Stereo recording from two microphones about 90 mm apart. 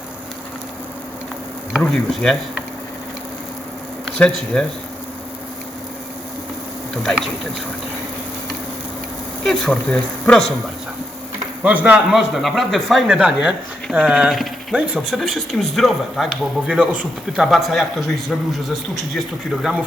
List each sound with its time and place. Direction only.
1.8 s speech: 5° left (ahead or behind)
4.5 s speech: 10° left (ahead or behind)
6.9 s speech: 5° left (ahead or behind)
9.4 s speech: 5° left (ahead or behind)
11.6 s speech: 15° right (ahead or behind)
12.1 s speech: centre (ahead or behind)
17.3 s speech: centre (ahead or behind)
19.1 s speech: centre (ahead or behind)